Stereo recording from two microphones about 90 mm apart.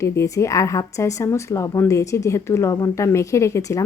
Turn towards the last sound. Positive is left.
turn(degrees=35)  # may be behind; listen again after turning